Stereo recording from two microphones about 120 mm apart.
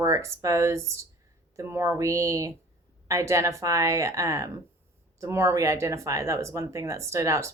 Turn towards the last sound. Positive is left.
turn(degrees=-25)  # may be behind; listen again after turning